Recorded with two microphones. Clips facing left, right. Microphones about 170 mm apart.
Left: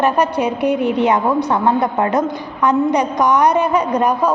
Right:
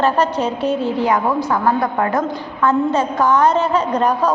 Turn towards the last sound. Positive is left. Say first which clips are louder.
# left 1 dB
turn(degrees=10)  # may be behind; listen again after turning